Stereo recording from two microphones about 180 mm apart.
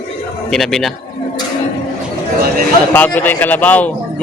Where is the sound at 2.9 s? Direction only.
10° left (ahead or behind).